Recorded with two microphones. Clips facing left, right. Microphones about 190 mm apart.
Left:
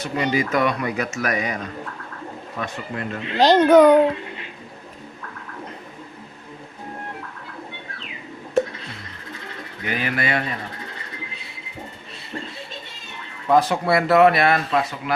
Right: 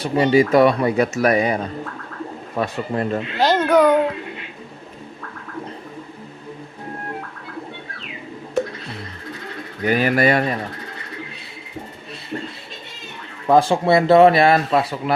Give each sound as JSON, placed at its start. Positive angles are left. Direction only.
{"t": 0.0, "sound": "speech", "side_deg": -30}
{"t": 3.3, "sound": "a child's voice", "side_deg": 20}
{"t": 9.8, "sound": "speech", "side_deg": -40}
{"t": 13.5, "sound": "speech", "side_deg": -30}